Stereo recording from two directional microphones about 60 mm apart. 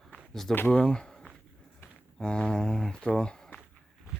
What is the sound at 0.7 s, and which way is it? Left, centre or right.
Speech, centre.